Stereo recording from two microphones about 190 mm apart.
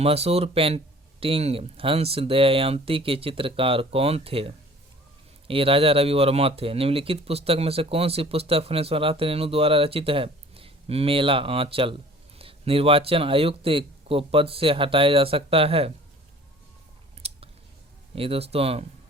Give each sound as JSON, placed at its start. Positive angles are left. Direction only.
{"t": 0.0, "sound": "speech", "side_deg": -30}
{"t": 17.2, "sound": "chewing", "side_deg": -35}
{"t": 18.1, "sound": "speech", "side_deg": -30}